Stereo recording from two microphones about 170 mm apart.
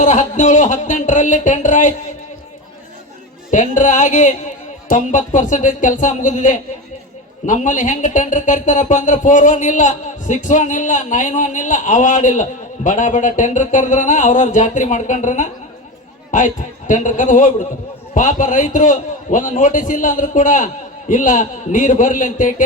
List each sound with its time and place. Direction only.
0.0 s speech: 45° left (ahead or behind)
3.5 s speech: 50° left (ahead or behind)